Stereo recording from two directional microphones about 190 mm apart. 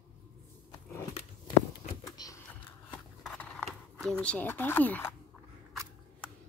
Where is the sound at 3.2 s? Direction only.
5° left (ahead or behind).